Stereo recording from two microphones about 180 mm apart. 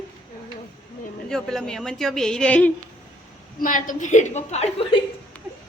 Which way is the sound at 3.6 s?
50° left (ahead or behind).